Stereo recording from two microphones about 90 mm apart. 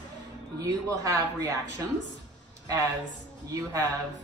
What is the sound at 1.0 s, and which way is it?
Speech, 35° right (ahead or behind).